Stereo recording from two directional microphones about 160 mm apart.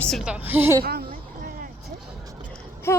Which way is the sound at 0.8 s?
70° right (ahead or behind).